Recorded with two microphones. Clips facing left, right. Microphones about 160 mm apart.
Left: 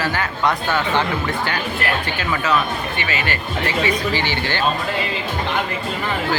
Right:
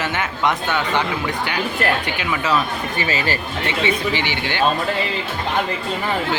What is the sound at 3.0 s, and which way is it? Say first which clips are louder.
Speech: right 2 dB; 35° right (ahead or behind).